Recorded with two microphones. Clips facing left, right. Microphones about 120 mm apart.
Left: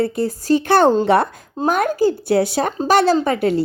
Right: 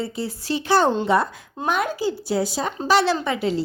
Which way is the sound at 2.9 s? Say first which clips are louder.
Left 4 dB; 50° left (ahead or behind).